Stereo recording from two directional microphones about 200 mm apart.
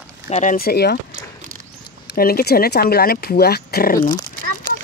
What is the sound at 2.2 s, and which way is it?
Speech, 50° left (ahead or behind).